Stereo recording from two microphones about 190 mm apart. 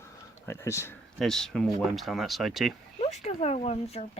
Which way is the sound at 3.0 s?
35° left (ahead or behind).